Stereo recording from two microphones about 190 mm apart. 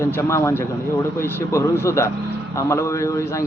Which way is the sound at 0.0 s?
15° left (ahead or behind).